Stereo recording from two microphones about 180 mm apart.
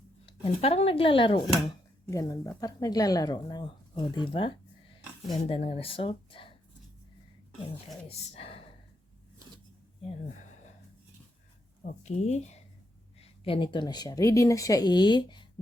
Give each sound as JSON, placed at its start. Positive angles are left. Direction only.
{"t": 0.3, "sound": "speech", "side_deg": 30}
{"t": 2.0, "sound": "speech", "side_deg": 20}
{"t": 8.0, "sound": "speech", "side_deg": 30}
{"t": 11.8, "sound": "speech", "side_deg": 40}